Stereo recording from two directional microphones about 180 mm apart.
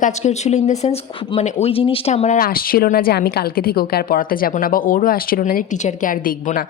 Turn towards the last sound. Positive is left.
turn(degrees=50)  # may be behind; listen again after turning